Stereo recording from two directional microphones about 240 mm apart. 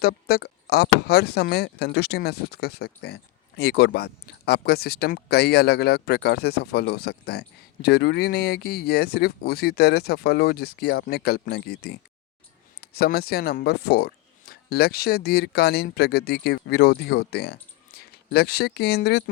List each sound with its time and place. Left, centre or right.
0.0 s speech: left